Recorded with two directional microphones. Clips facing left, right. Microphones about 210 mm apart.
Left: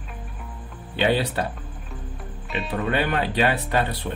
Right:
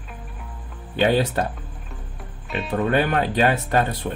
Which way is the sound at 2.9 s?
45° right (ahead or behind).